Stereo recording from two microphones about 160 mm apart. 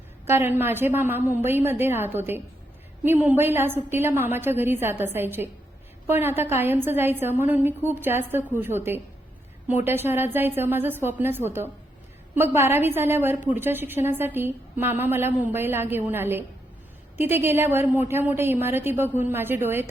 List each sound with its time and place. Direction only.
0.3 s a woman's voice: 15° right (ahead or behind)